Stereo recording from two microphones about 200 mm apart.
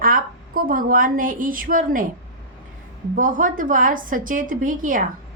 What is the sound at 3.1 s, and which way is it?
A woman's voice, 40° right (ahead or behind).